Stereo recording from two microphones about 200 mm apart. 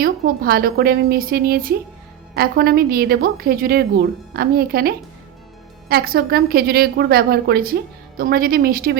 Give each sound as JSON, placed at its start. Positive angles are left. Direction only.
{"t": 0.0, "sound": "a woman's voice", "side_deg": -50}